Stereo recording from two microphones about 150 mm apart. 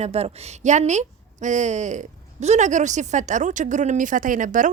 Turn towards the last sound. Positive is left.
turn(degrees=-60)  # may be behind; listen again after turning